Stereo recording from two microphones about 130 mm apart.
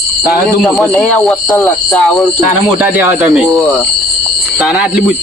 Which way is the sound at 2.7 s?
15° right (ahead or behind).